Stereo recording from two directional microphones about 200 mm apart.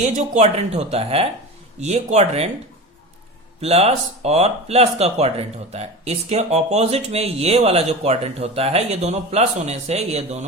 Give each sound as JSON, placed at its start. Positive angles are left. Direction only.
{"t": 0.0, "sound": "speech", "side_deg": -35}
{"t": 3.6, "sound": "speech", "side_deg": -30}